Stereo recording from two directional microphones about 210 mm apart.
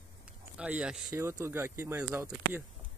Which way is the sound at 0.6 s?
5° right (ahead or behind).